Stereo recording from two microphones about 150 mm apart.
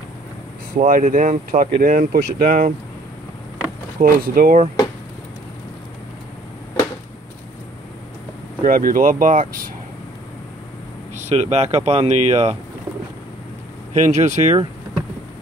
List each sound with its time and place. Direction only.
0.7 s speech: 60° right (ahead or behind)
4.0 s speech: 70° right (ahead or behind)
8.6 s speech: 70° right (ahead or behind)
11.1 s speech: 50° right (ahead or behind)
13.9 s speech: 50° right (ahead or behind)